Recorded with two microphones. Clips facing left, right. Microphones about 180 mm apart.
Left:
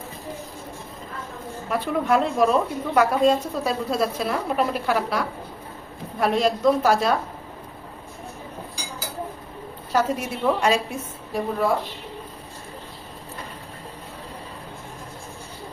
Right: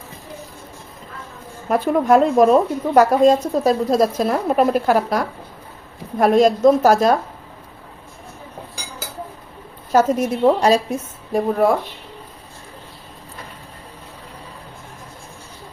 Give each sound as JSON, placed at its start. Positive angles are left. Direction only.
{"t": 1.7, "sound": "a woman's voice", "side_deg": -45}
{"t": 9.9, "sound": "a woman's voice", "side_deg": -45}